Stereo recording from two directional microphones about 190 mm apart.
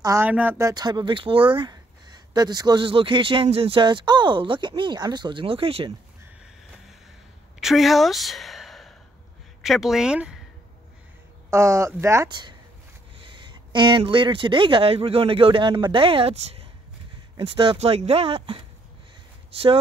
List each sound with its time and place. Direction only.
0.0 s speech: 15° right (ahead or behind); by 5.9 s 30° right (ahead or behind)
7.6 s a woman's voice: centre (ahead or behind)
11.5 s speech: 15° right (ahead or behind); by 18.6 s 30° right (ahead or behind)